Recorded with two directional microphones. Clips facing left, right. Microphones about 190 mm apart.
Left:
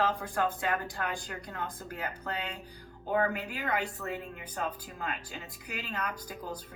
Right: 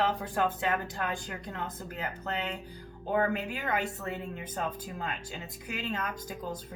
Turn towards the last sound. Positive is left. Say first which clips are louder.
# right 2 dB
turn(degrees=-25)  # may be behind; listen again after turning